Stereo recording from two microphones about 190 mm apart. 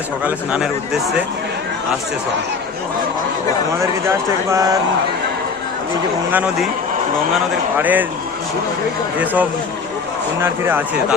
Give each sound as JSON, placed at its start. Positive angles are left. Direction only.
{"t": 0.3, "sound": "speech", "side_deg": -5}
{"t": 4.4, "sound": "speech", "side_deg": -15}
{"t": 6.3, "sound": "speech", "side_deg": -5}
{"t": 9.1, "sound": "speech", "side_deg": -10}